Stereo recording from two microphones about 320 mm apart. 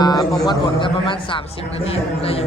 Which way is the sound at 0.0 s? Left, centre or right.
Centre.